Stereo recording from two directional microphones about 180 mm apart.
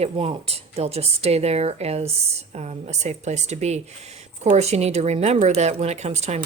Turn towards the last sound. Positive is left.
turn(degrees=-35)  # may be behind; listen again after turning